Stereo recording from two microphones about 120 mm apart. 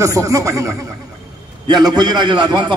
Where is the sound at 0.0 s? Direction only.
25° right (ahead or behind).